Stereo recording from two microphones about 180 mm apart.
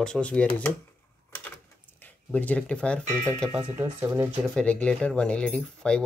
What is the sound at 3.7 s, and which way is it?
Speech, 15° right (ahead or behind).